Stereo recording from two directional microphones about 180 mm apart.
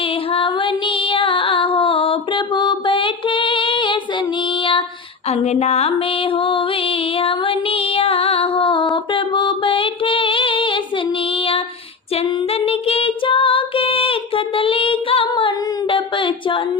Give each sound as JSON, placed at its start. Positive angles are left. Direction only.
{"t": 0.3, "sound": "female singing", "side_deg": 30}
{"t": 5.3, "sound": "music", "side_deg": 35}
{"t": 12.1, "sound": "singing", "side_deg": 30}